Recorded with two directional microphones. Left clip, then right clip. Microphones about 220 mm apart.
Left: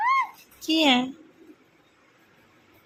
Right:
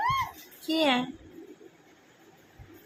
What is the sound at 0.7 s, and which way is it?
Speech, 35° left (ahead or behind).